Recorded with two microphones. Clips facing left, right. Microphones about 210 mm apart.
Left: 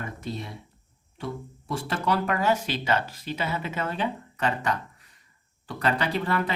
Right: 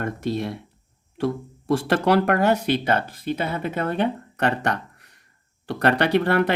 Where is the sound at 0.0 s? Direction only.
75° right (ahead or behind).